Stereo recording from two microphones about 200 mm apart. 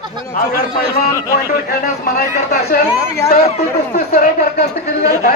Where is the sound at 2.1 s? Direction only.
50° left (ahead or behind).